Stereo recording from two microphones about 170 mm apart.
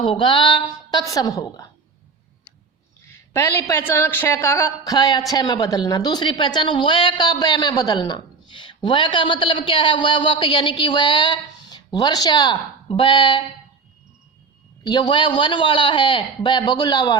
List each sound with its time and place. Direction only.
0.0 s a woman's voice: 30° left (ahead or behind)
3.1 s a man's voice: 15° left (ahead or behind)
14.8 s a woman's voice: 25° left (ahead or behind)